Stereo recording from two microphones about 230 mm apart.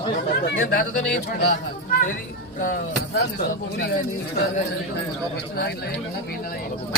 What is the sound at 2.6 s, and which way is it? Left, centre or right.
Speech, left.